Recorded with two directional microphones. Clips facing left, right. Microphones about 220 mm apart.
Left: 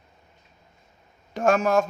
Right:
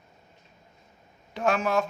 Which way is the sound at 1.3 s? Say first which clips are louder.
Left 5 dB; 45° left (ahead or behind).